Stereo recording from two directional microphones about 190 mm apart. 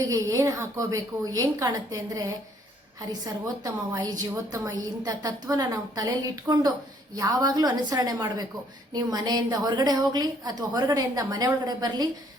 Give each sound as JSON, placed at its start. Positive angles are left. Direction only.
{"t": 0.0, "sound": "a woman's voice", "side_deg": -15}
{"t": 3.6, "sound": "a woman's voice", "side_deg": -20}